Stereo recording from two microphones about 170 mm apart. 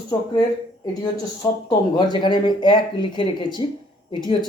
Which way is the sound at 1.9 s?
25° left (ahead or behind).